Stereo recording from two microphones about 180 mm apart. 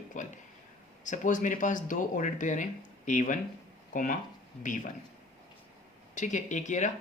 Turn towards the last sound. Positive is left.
turn(degrees=40)  # may be behind; listen again after turning